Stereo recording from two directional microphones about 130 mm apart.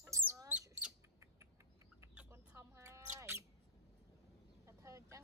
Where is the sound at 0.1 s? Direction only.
20° right (ahead or behind).